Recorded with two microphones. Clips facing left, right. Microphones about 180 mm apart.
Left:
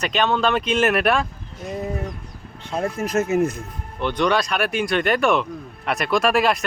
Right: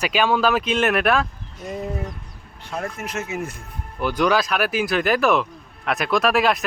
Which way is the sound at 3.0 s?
40° left (ahead or behind).